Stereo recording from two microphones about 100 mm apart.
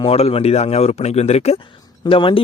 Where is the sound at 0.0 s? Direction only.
80° left.